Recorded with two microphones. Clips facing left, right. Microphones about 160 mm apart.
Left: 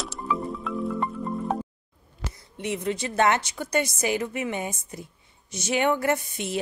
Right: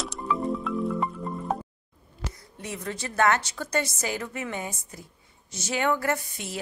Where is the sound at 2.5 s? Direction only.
20° left (ahead or behind).